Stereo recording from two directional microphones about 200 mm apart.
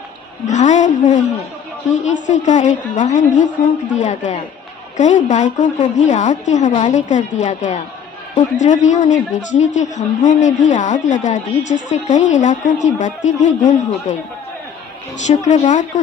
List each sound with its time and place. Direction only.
0.5 s a woman's voice: 35° left (ahead or behind)
15.2 s a woman's voice: 35° left (ahead or behind)